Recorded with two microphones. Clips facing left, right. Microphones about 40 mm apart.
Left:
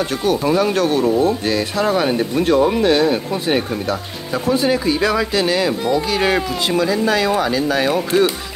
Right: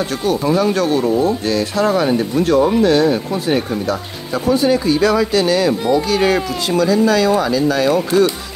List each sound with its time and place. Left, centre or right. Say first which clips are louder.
0.2 s speech: right 1 dB; centre
0.7 s speech: right 1 dB; left
4.5 s speech: right 3 dB; centre
5.7 s speech: right 3 dB; centre
6.0 s speech: right 2 dB; centre